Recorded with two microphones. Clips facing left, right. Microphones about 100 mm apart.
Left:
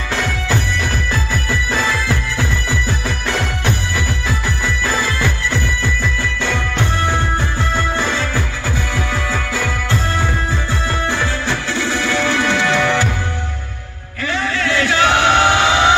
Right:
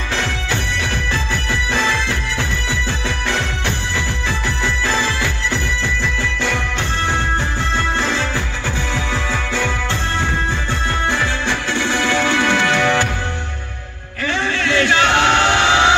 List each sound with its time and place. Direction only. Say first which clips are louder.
1.5 s music: even; 20° right (ahead or behind)
5.0 s music: left 1 dB; 20° right (ahead or behind)
8.9 s music: left 1 dB; 20° right (ahead or behind)
11.4 s music: even; 20° right (ahead or behind)
12.4 s music: even; 15° left (ahead or behind)
12.8 s music: even; 15° right (ahead or behind)
14.7 s a sound: even; 15° left (ahead or behind)